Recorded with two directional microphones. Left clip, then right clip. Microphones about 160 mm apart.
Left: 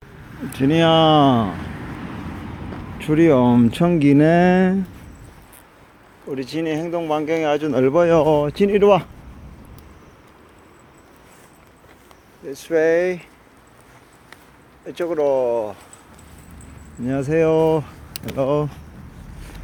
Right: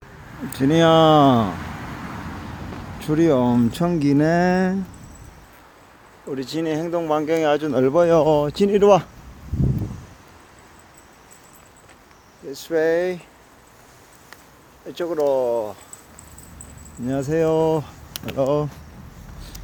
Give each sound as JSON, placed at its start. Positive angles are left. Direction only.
{"t": 0.7, "sound": "speech", "side_deg": -25}
{"t": 3.0, "sound": "speech", "side_deg": -10}
{"t": 6.2, "sound": "speech", "side_deg": -25}
{"t": 7.6, "sound": "speech", "side_deg": -15}
{"t": 12.5, "sound": "speech", "side_deg": -5}
{"t": 14.8, "sound": "speech", "side_deg": 0}
{"t": 17.1, "sound": "speech", "side_deg": -5}